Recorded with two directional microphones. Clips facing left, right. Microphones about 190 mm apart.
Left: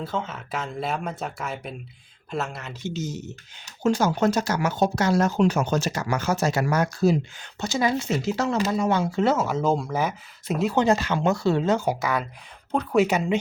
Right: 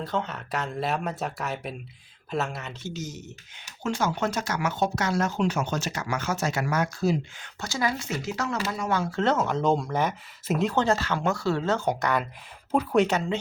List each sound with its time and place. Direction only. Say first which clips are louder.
0.0 s speech: even; centre (ahead or behind)
2.8 s speech: left 7 dB; 25° left (ahead or behind)
3.8 s speech: left 6 dB; 40° left (ahead or behind)
7.6 s speech: left 5 dB; 20° left (ahead or behind); by 10.7 s centre (ahead or behind)
10.7 s speech: left 7 dB; 15° left (ahead or behind); by 13.0 s 5° right (ahead or behind)
13.0 s speech: left 4 dB; 10° left (ahead or behind)